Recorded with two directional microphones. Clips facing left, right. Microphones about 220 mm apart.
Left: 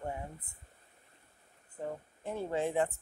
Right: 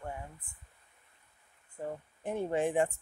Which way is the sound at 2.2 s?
15° right (ahead or behind).